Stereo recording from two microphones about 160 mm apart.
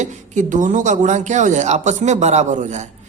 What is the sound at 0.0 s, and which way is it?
Speech, 50° right (ahead or behind).